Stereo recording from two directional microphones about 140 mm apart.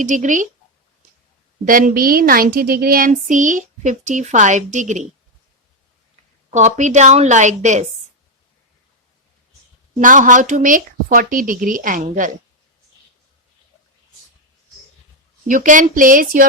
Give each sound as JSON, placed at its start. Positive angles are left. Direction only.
{"t": 0.0, "sound": "a woman's voice", "side_deg": -65}
{"t": 1.6, "sound": "speech", "side_deg": -75}
{"t": 6.5, "sound": "a woman's voice", "side_deg": -60}
{"t": 10.0, "sound": "speech", "side_deg": -65}
{"t": 15.4, "sound": "speech", "side_deg": -70}